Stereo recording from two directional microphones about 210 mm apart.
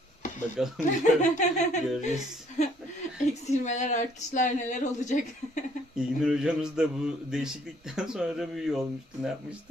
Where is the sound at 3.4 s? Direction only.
35° left (ahead or behind).